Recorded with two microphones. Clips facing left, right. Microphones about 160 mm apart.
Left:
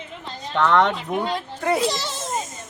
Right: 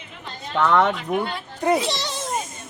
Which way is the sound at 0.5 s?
5° right (ahead or behind).